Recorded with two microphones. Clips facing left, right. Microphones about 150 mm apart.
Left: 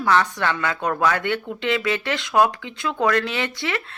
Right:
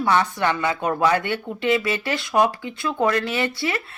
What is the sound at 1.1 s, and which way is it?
Speech, 55° left (ahead or behind).